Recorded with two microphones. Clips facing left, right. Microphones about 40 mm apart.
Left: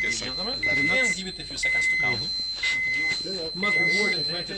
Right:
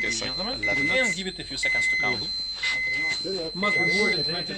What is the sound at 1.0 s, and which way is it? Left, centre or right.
Speech, right.